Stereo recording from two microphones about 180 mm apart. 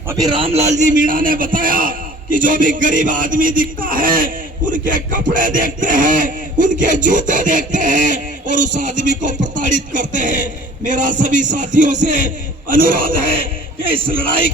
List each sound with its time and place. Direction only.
0.1 s a man's voice: 25° right (ahead or behind); by 13.1 s 50° right (ahead or behind)